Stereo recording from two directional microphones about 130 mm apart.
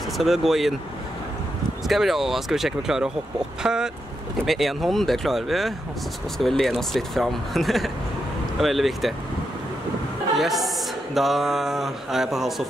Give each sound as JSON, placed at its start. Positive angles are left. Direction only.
{"t": 0.2, "sound": "speech", "side_deg": 0}
{"t": 1.9, "sound": "speech", "side_deg": 0}
{"t": 10.3, "sound": "speech", "side_deg": 0}